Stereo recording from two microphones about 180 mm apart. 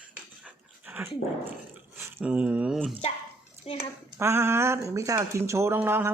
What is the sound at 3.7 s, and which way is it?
Speech, 30° left (ahead or behind).